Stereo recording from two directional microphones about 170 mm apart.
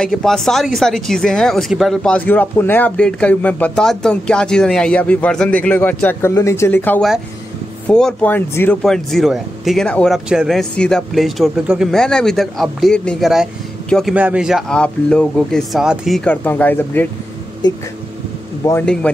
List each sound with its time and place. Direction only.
0.0 s speech: 5° left (ahead or behind)
16.3 s speech: 10° left (ahead or behind)
17.6 s speech: 25° left (ahead or behind)
18.7 s speech: 10° left (ahead or behind)